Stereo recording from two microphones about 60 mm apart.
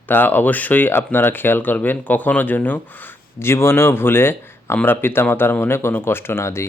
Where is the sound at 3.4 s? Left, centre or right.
Left.